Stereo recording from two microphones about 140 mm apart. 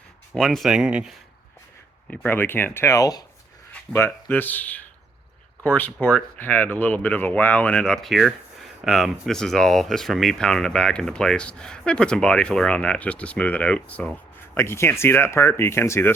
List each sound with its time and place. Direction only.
0.3 s speech: centre (ahead or behind)
2.0 s speech: 15° left (ahead or behind)
3.8 s speech: 15° left (ahead or behind)